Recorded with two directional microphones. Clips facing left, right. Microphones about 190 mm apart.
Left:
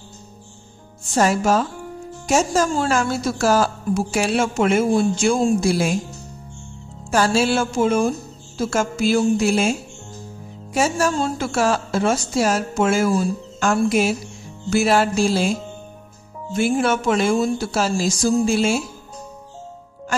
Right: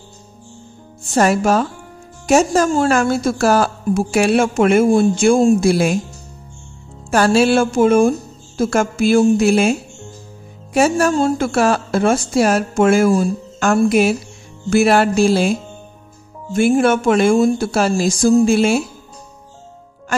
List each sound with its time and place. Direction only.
1.1 s a woman's voice: 60° right (ahead or behind)
7.1 s a woman's voice: 60° right (ahead or behind)
16.5 s a woman's voice: 55° right (ahead or behind)